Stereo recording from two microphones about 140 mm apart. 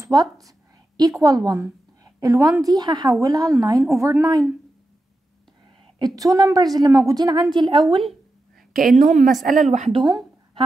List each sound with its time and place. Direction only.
0.0 s a woman's voice: 25° right (ahead or behind)
5.9 s a woman's voice: 25° right (ahead or behind)
8.7 s a woman's voice: 65° right (ahead or behind)
9.9 s a sound: 30° right (ahead or behind)